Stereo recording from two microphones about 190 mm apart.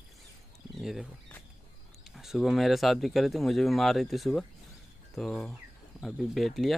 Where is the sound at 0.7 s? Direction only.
Centre (ahead or behind).